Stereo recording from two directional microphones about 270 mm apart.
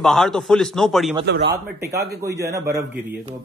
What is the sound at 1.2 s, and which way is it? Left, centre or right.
Speech, right.